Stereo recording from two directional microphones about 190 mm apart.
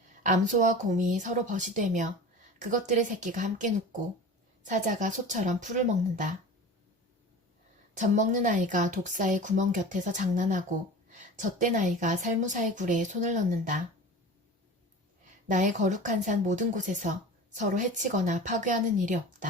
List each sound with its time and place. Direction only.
0.2 s speech: 40° right (ahead or behind)
7.9 s speech: 40° right (ahead or behind)
15.4 s speech: 40° right (ahead or behind)